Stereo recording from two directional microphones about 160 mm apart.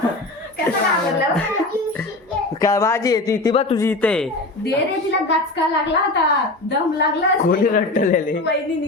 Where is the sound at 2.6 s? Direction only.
20° left (ahead or behind).